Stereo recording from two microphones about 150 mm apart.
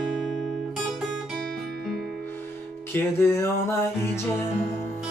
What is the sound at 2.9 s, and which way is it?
Music, 15° left (ahead or behind).